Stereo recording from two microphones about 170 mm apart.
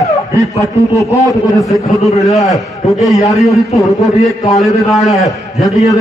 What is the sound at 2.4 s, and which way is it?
Speech, centre (ahead or behind).